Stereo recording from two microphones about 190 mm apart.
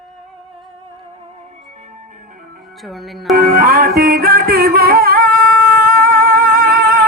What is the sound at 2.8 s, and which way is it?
Music, centre (ahead or behind).